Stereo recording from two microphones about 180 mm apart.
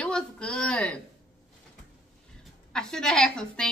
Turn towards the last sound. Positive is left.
turn(degrees=5)  # may be behind; listen again after turning